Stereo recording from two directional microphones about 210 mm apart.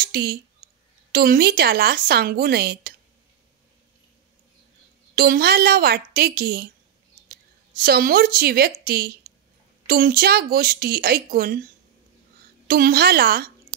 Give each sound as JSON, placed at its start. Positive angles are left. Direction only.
{"t": 0.0, "sound": "a sound", "side_deg": -50}
{"t": 1.1, "sound": "a woman's voice", "side_deg": -45}
{"t": 5.1, "sound": "a woman's voice", "side_deg": -45}
{"t": 7.8, "sound": "a woman's voice", "side_deg": -45}
{"t": 12.6, "sound": "a woman's voice", "side_deg": -45}